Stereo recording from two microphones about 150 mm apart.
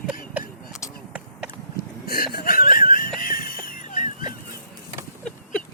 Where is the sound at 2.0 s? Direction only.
80° left; by 4.4 s 60° left (ahead or behind).